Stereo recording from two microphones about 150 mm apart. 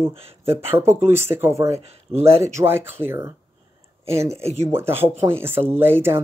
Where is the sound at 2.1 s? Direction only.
45° right (ahead or behind).